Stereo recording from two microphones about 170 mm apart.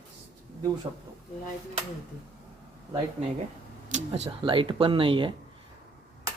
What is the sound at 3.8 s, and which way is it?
Speech, 45° right (ahead or behind).